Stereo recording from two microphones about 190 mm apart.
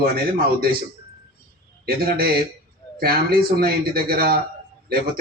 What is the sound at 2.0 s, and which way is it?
A man's voice, 55° right (ahead or behind).